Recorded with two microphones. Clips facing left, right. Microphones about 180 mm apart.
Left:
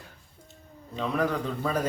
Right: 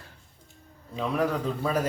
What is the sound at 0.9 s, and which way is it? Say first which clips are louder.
Speech: right 1 dB; 10° right (ahead or behind).